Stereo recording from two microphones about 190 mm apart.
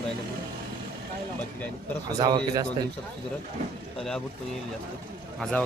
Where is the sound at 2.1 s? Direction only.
20° right (ahead or behind).